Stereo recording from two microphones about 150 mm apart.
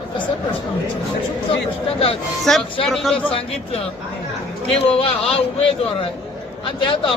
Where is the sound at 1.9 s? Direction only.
40° left (ahead or behind).